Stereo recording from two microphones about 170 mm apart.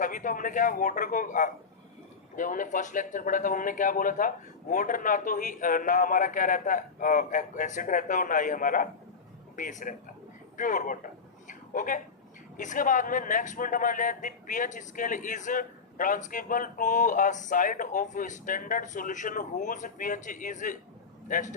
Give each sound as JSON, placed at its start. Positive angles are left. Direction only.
{"t": 0.0, "sound": "a man's voice", "side_deg": 50}
{"t": 11.4, "sound": "a sound", "side_deg": 50}
{"t": 12.5, "sound": "a man's voice", "side_deg": 50}